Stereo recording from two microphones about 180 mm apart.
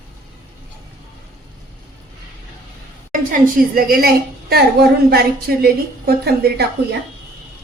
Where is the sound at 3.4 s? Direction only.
55° right (ahead or behind).